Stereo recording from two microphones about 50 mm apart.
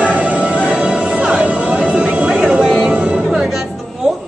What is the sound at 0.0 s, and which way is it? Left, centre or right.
Music, right.